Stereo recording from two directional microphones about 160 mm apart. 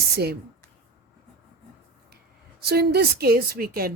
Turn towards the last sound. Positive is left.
turn(degrees=-70)  # may be behind; listen again after turning